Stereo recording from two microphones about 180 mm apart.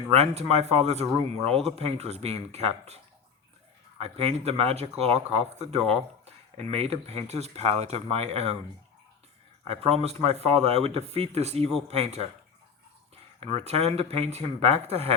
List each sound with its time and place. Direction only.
0.1 s speech: 35° right (ahead or behind)
9.6 s speech: 35° right (ahead or behind)
13.4 s speech: 35° right (ahead or behind)